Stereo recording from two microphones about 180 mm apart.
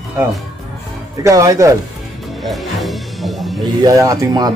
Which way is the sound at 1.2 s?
20° right (ahead or behind).